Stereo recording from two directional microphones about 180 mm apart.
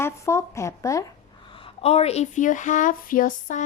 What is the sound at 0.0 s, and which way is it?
Speech, 15° left (ahead or behind).